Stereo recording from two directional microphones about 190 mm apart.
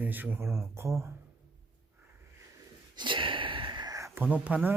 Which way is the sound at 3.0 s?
25° right (ahead or behind).